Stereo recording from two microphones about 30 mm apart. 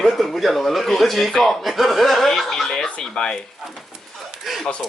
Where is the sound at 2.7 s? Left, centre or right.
Left.